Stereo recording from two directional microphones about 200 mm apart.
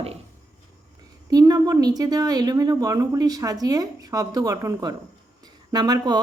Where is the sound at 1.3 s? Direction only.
20° right (ahead or behind).